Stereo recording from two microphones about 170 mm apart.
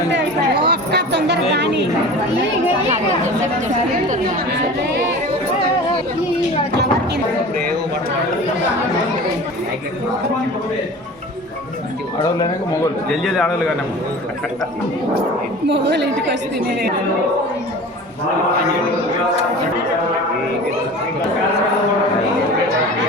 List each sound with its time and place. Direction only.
0.6 s speech: 75° right (ahead or behind)
12.2 s speech: 25° left (ahead or behind)
13.1 s a man's voice: 5° left (ahead or behind)
15.7 s a woman's voice: 90° right